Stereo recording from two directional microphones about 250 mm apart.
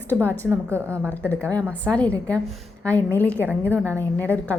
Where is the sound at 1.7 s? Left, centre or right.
Centre.